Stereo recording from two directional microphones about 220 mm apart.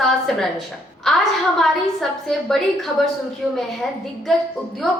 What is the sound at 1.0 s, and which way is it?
A woman's voice, centre (ahead or behind).